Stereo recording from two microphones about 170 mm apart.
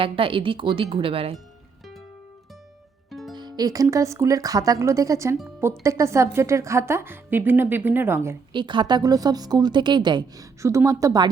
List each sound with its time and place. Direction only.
0.0 s speech: 30° right (ahead or behind)
3.1 s music: centre (ahead or behind)
3.3 s a woman's voice: 25° right (ahead or behind)
8.5 s a woman's voice: 25° right (ahead or behind)